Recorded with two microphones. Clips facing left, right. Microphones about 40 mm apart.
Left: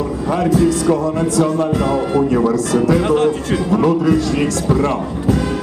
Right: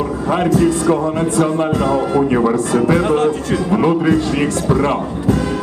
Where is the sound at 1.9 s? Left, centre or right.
Right.